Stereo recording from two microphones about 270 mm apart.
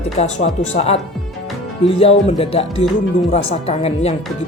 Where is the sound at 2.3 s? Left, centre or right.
Left.